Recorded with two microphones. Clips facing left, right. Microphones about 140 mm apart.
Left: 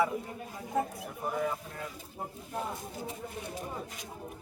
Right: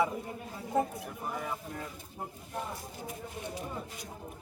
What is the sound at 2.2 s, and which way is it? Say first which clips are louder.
Speech: left 1 dB; 10° left (ahead or behind).